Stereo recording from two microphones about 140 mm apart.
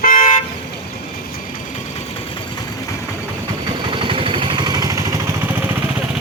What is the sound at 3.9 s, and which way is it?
Vehicle, 40° right (ahead or behind).